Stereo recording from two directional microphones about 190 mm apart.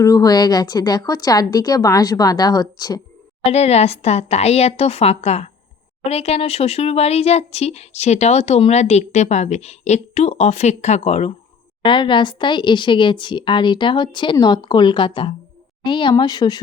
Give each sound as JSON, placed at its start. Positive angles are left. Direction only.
{"t": 0.0, "sound": "speech", "side_deg": 20}
{"t": 3.4, "sound": "speech", "side_deg": 35}